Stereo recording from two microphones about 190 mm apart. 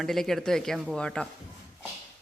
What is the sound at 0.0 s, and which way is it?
Speech, centre (ahead or behind).